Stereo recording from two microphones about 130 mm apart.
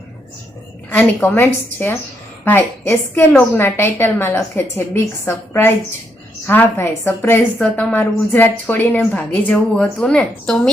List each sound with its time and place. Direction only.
0.9 s a woman's voice: 15° left (ahead or behind)